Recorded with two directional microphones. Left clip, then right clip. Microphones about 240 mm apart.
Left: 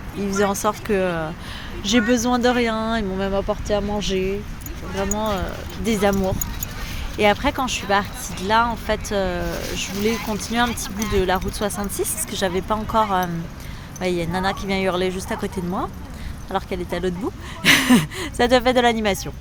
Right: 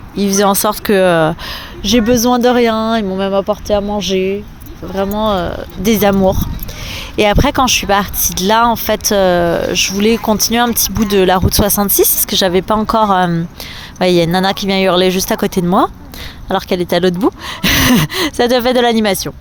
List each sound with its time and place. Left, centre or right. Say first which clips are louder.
0.3 s speech: right 8 dB; right